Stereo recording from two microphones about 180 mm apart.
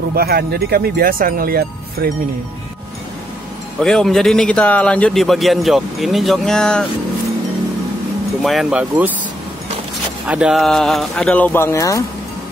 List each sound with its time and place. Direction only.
0.1 s speech: 60° right (ahead or behind)
3.8 s a man's voice: centre (ahead or behind)
8.4 s a man's voice: centre (ahead or behind)
10.2 s a man's voice: 5° right (ahead or behind); by 12.0 s 15° left (ahead or behind)